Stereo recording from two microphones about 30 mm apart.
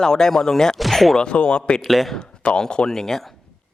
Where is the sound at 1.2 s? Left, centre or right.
Left.